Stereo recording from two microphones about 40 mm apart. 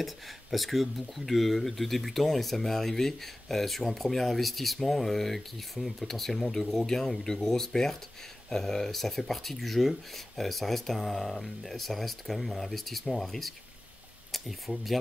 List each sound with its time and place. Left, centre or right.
0.0 s speech: centre